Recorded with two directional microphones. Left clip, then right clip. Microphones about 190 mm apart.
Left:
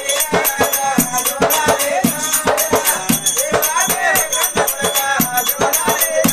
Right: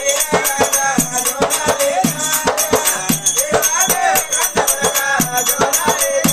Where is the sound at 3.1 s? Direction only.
Centre (ahead or behind).